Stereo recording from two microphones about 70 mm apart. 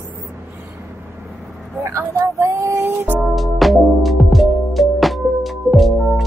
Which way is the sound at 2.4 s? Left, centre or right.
Right.